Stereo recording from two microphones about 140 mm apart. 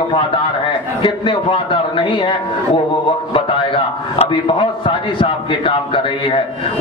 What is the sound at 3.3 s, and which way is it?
A man's voice, 40° left (ahead or behind).